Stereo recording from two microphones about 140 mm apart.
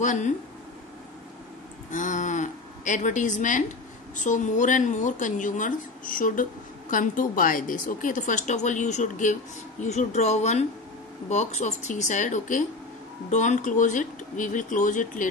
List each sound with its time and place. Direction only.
0.0 s a woman's voice: 60° left (ahead or behind)
1.9 s a woman's voice: 60° left (ahead or behind)